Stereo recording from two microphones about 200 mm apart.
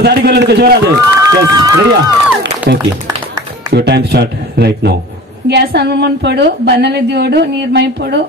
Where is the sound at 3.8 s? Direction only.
55° right (ahead or behind).